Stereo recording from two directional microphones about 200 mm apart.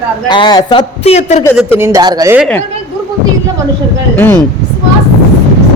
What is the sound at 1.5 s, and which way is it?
Speech, 10° right (ahead or behind).